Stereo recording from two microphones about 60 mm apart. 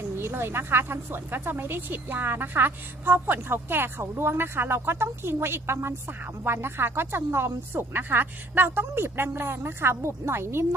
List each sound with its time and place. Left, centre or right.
0.1 s a woman's voice: right